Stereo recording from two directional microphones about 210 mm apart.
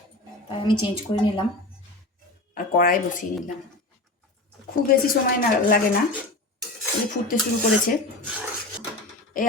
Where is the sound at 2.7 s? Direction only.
40° left (ahead or behind).